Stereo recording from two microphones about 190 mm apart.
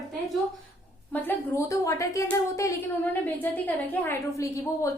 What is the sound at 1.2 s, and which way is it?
A woman's voice, 15° left (ahead or behind).